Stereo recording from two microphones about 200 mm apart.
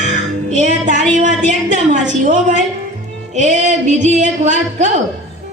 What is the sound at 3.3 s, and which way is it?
Speech, 35° right (ahead or behind).